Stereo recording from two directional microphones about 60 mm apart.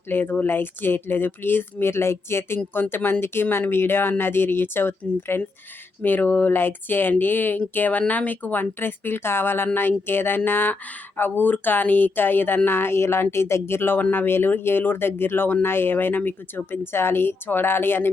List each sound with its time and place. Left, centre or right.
0.1 s speech: left